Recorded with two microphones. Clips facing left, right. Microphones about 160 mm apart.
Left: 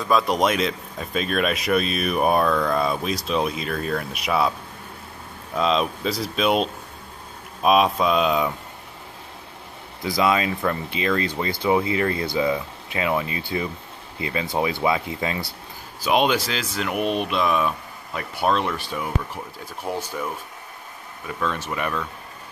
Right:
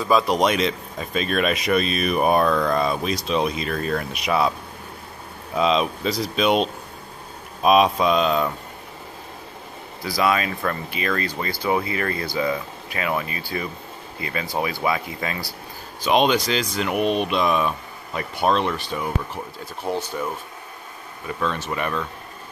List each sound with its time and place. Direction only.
0.0 s speech: centre (ahead or behind)
10.0 s speech: 20° left (ahead or behind)
16.0 s speech: 5° left (ahead or behind)
21.4 s speech: 5° left (ahead or behind)